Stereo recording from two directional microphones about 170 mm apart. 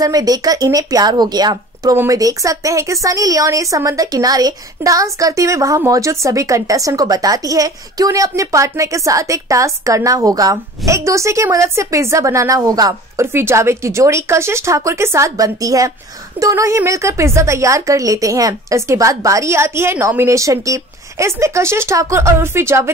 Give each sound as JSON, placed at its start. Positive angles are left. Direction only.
{"t": 0.0, "sound": "a woman's voice", "side_deg": -20}